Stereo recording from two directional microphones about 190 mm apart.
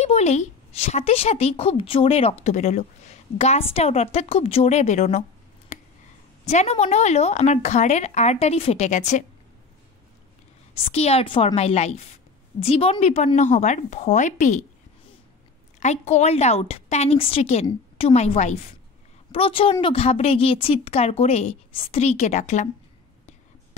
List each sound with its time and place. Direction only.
0.0 s a woman's voice: 35° left (ahead or behind)
5.7 s a sound: 40° left (ahead or behind)
6.4 s a woman's voice: 35° left (ahead or behind)
10.8 s a woman's voice: 35° left (ahead or behind)
15.8 s a woman's voice: 35° left (ahead or behind)